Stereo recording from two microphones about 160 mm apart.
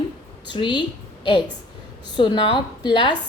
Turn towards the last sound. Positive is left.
turn(degrees=30)  # may be behind; listen again after turning